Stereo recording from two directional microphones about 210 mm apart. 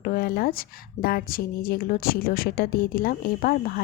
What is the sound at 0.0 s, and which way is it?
A woman's voice, 45° left (ahead or behind).